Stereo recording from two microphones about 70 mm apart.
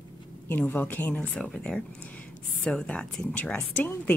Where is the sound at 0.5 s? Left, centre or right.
Left.